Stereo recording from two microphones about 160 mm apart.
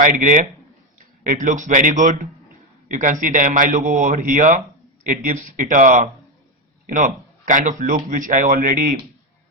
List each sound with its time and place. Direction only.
0.0 s a man's voice: 55° right (ahead or behind)